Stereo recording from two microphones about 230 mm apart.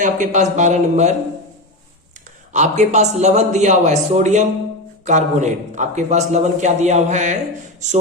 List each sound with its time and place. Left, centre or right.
0.0 s a man's voice: right
2.5 s a man's voice: right